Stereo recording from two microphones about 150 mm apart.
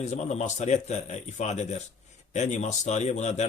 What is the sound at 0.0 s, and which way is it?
Speech, 50° left (ahead or behind).